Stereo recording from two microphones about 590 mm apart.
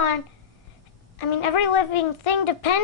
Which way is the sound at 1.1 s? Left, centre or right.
Left.